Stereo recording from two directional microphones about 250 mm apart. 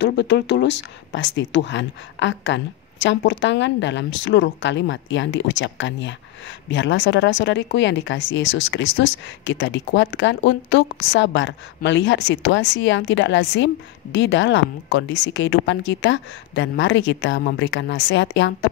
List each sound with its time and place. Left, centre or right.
0.0 s speech: left